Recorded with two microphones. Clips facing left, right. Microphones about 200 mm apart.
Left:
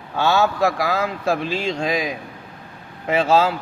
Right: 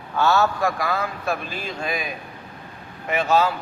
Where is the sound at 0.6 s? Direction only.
90° left.